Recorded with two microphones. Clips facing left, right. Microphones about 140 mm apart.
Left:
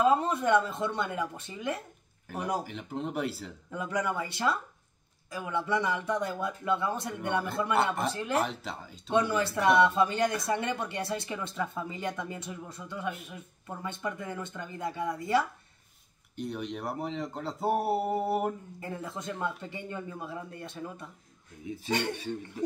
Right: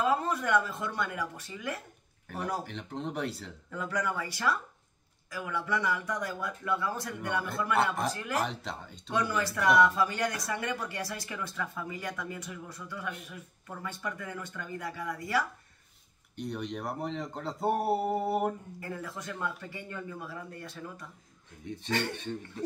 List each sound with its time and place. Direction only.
0.0 s speech: 20° left (ahead or behind)
2.2 s speech: 10° left (ahead or behind)
3.7 s speech: 20° left (ahead or behind)
7.7 s speech: centre (ahead or behind)
8.1 s speech: 25° left (ahead or behind)
8.4 s speech: centre (ahead or behind)
9.1 s speech: 25° left (ahead or behind)
16.3 s speech: centre (ahead or behind)
18.8 s speech: 20° left (ahead or behind)
21.6 s speech: 5° left (ahead or behind)